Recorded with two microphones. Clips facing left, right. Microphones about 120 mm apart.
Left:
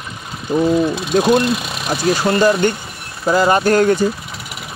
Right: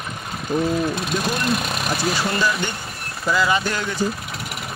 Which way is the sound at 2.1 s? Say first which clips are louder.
Left 8 dB; 45° left (ahead or behind).